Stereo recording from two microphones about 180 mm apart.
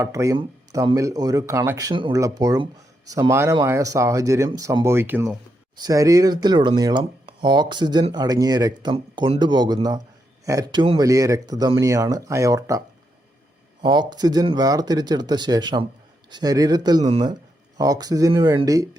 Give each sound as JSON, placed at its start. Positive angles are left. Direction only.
{"t": 0.0, "sound": "speech", "side_deg": -15}
{"t": 13.8, "sound": "speech", "side_deg": -25}